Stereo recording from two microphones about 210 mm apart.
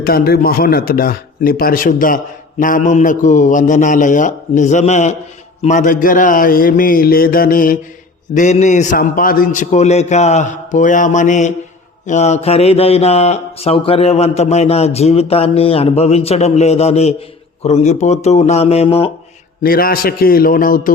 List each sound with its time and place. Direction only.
0.0 s speech: 45° left (ahead or behind)
12.0 s mantra: 35° left (ahead or behind)
17.6 s speech: 30° left (ahead or behind)
19.6 s a man's voice: 45° left (ahead or behind)